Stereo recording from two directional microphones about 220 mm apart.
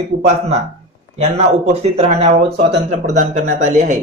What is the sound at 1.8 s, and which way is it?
Speech, 30° right (ahead or behind).